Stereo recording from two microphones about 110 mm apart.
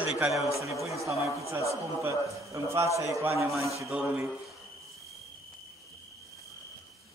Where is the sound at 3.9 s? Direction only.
10° right (ahead or behind).